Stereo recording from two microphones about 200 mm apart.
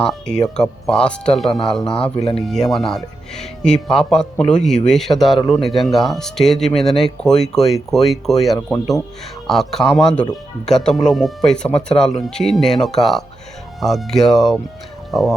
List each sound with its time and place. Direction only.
0.0 s speech: 5° left (ahead or behind)
2.1 s speech: 30° left (ahead or behind)
2.4 s speech: centre (ahead or behind)